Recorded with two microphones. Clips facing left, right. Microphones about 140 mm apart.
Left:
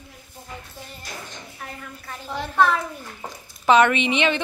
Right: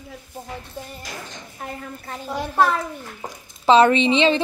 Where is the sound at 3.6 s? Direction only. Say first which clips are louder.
Right 3 dB; 30° right (ahead or behind).